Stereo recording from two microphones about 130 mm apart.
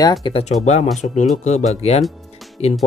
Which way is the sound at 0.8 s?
Centre (ahead or behind).